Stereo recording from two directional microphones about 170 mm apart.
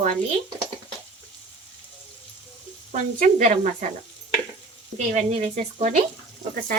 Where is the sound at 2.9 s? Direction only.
45° right (ahead or behind).